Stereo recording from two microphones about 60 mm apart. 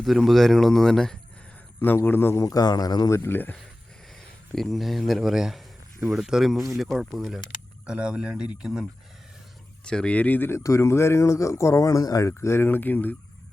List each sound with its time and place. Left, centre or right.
0.0 s speech: centre
2.0 s speech: left
2.3 s a man's voice: left
3.1 s speech: left
4.5 s speech: centre
7.9 s speech: centre
9.8 s speech: centre; by 10.5 s left
10.6 s speech: left
12.4 s speech: left